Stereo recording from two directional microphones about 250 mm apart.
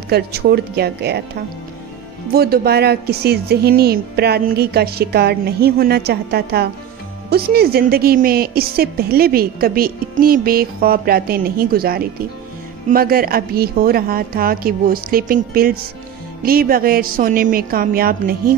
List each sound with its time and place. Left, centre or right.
0.1 s a woman's voice: right